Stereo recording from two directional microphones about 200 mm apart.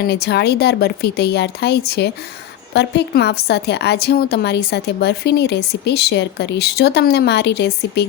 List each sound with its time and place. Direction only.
0.0 s a woman's voice: 55° left (ahead or behind)